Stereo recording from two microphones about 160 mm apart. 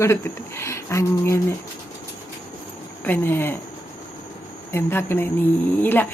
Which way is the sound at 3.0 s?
15° left (ahead or behind).